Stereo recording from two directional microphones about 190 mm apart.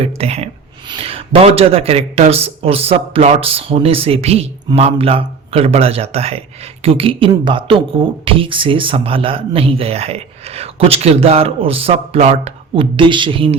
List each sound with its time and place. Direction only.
0.0 s speech: 35° right (ahead or behind)